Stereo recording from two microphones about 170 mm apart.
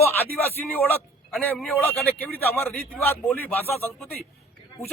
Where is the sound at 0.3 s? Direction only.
10° left (ahead or behind).